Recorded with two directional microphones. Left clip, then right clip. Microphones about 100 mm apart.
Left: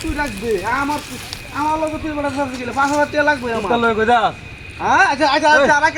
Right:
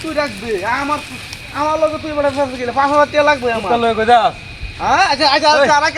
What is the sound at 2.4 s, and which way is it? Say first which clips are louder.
Speech: right 3 dB; 20° right (ahead or behind).